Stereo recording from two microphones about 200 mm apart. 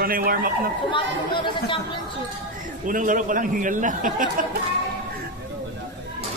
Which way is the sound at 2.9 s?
40° right (ahead or behind).